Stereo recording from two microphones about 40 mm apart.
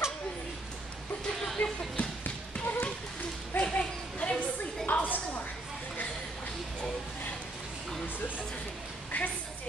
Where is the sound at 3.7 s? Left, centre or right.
Left.